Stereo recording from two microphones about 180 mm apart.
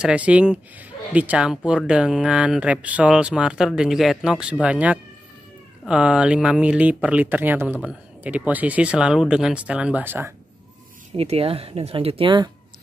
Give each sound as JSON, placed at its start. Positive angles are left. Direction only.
{"t": 0.0, "sound": "speech", "side_deg": -5}
{"t": 11.1, "sound": "speech", "side_deg": -30}